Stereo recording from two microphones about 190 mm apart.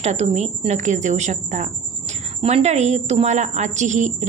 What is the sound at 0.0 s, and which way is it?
A woman's voice, 35° right (ahead or behind).